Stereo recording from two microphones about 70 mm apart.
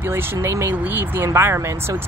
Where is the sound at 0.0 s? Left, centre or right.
Right.